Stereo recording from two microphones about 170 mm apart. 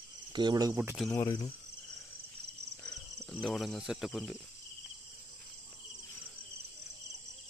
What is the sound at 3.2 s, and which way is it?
Speech, centre (ahead or behind).